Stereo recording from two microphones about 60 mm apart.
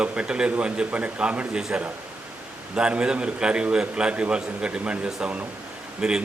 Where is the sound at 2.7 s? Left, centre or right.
Centre.